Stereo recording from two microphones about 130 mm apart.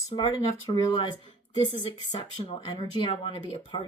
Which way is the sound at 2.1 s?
40° left (ahead or behind).